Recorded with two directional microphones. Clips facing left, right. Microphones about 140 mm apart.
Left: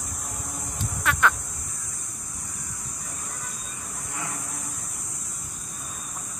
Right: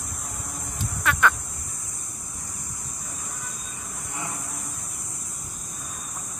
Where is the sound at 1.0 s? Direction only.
Centre (ahead or behind).